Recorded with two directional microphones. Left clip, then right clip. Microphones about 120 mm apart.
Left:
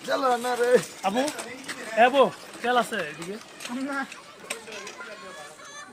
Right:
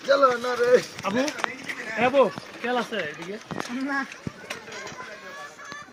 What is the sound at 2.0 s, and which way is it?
Speech, 30° left (ahead or behind).